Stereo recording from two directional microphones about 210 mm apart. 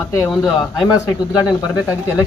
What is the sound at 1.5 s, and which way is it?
Speech, 20° left (ahead or behind).